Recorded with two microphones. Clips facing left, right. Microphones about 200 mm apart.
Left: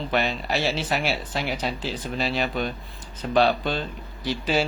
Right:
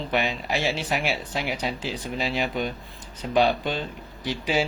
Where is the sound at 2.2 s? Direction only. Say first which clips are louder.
Left 1 dB; 15° right (ahead or behind).